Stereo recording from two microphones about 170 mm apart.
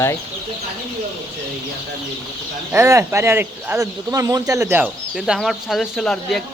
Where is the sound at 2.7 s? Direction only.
15° right (ahead or behind).